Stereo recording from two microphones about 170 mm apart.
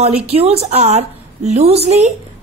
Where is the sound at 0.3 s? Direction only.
35° right (ahead or behind).